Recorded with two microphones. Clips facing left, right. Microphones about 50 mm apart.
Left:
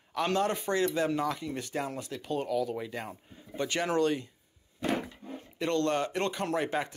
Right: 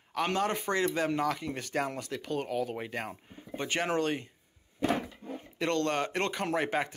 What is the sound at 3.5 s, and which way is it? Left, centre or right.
Speech, right.